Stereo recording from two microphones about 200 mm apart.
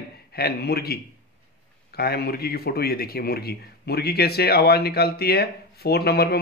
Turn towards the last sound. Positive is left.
turn(degrees=50)  # may be behind; listen again after turning